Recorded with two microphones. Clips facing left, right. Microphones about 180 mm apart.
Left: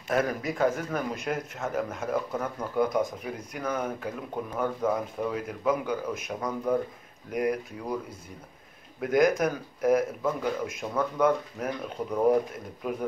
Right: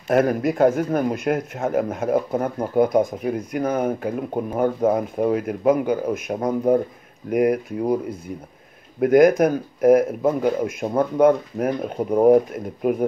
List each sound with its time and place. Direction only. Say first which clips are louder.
0.1 s speech: right 9 dB; 55° right (ahead or behind)
7.2 s speech: right 9 dB; 60° right (ahead or behind)
9.0 s speech: right 9 dB; 55° right (ahead or behind)